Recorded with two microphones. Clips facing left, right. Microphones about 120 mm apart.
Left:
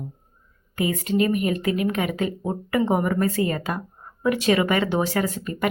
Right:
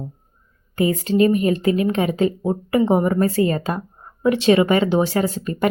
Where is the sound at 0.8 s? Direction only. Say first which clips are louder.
Right 5 dB; 30° right (ahead or behind).